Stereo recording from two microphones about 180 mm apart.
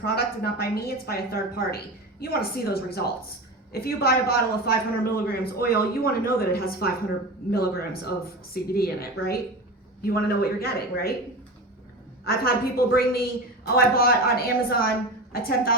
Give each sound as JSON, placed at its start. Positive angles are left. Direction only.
{"t": 0.0, "sound": "a man's voice", "side_deg": 60}
{"t": 12.2, "sound": "a man's voice", "side_deg": 55}